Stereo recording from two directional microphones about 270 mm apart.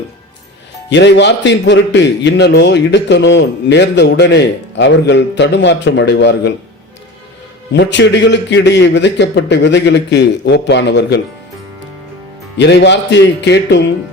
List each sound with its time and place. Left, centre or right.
0.9 s a man's voice: left
7.7 s a man's voice: left
12.5 s a man's voice: left